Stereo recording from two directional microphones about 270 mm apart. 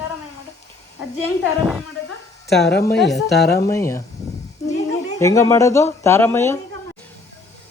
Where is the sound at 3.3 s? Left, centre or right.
Left.